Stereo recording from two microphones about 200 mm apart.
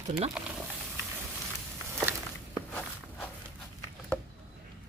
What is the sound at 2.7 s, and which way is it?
Walk, 5° left (ahead or behind).